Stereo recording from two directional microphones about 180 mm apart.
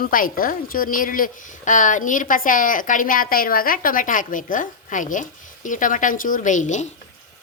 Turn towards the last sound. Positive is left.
turn(degrees=40)  # may be behind; listen again after turning